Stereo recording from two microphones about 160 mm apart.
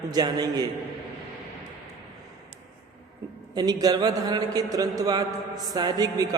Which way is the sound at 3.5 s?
25° right (ahead or behind).